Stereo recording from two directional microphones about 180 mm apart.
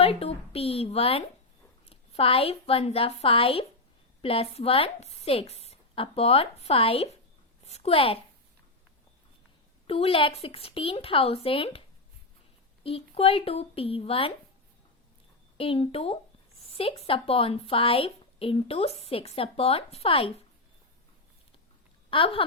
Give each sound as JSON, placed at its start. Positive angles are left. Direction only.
{"t": 0.0, "sound": "a woman's voice", "side_deg": 35}
{"t": 9.8, "sound": "speech", "side_deg": 30}
{"t": 12.8, "sound": "speech", "side_deg": 30}
{"t": 15.5, "sound": "speech", "side_deg": 30}
{"t": 22.1, "sound": "speech", "side_deg": 30}